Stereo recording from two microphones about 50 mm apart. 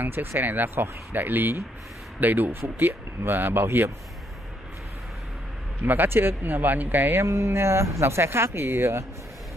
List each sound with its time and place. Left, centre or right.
0.0 s speech: right
5.8 s speech: right
7.2 s speech: right
8.0 s speech: right